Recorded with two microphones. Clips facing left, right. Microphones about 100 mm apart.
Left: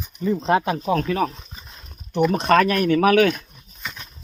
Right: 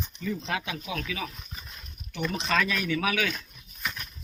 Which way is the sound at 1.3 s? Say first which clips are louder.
Left 3 dB; 30° left (ahead or behind).